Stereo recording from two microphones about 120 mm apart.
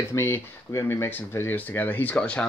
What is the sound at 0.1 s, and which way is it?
Speech, 25° left (ahead or behind).